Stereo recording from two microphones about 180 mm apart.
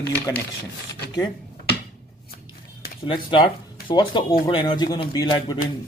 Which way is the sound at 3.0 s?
30° left (ahead or behind).